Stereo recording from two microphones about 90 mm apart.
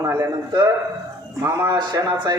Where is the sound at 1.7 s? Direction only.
50° right (ahead or behind).